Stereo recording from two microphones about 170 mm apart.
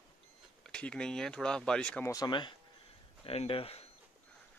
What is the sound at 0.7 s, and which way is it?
Speech, 5° left (ahead or behind).